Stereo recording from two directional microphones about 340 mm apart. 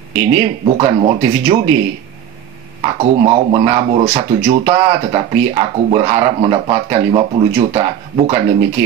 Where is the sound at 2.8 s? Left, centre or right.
Centre.